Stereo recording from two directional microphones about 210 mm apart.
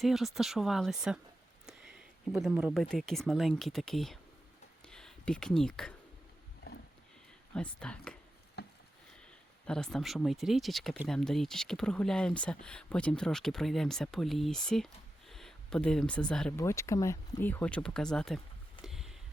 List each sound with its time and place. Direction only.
0.0 s speech: centre (ahead or behind)
1.6 s a sound: centre (ahead or behind)
2.9 s speech: centre (ahead or behind)
7.5 s speech: 5° left (ahead or behind)
8.6 s a sound: 50° left (ahead or behind)
9.6 s speech: 5° left (ahead or behind)
18.8 s vehicle: centre (ahead or behind)